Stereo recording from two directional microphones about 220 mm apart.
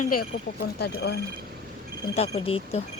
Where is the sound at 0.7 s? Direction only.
50° left (ahead or behind).